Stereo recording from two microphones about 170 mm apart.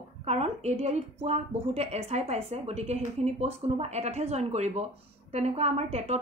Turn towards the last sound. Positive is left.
turn(degrees=-40)  # may be behind; listen again after turning